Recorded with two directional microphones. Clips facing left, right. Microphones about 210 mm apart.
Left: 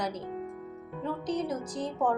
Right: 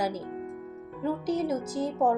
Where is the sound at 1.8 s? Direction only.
25° right (ahead or behind).